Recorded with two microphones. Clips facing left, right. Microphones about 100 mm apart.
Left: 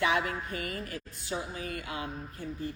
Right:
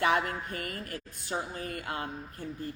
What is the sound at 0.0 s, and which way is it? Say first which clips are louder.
A woman's voice: right 1 dB; 50° right (ahead or behind).